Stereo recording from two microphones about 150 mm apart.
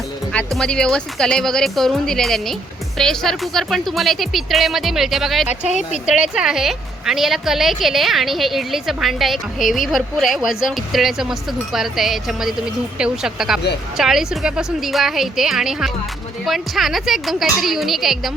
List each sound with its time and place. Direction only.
0.3 s a woman's voice: 5° left (ahead or behind)